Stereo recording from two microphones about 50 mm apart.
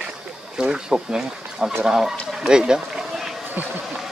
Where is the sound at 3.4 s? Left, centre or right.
Right.